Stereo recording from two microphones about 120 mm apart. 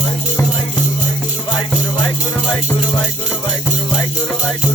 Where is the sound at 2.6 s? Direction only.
35° left (ahead or behind).